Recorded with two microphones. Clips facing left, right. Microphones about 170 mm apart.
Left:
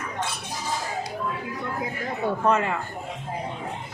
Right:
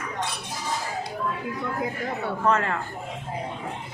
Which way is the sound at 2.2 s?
15° left (ahead or behind).